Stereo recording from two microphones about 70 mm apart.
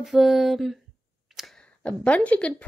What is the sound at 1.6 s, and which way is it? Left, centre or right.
Speech, centre.